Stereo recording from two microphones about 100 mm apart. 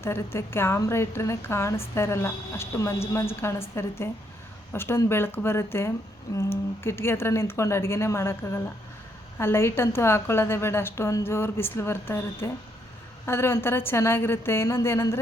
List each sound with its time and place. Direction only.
0.0 s a woman's voice: 25° left (ahead or behind)
6.3 s a sound: 35° left (ahead or behind)
6.8 s a woman's voice: 25° left (ahead or behind)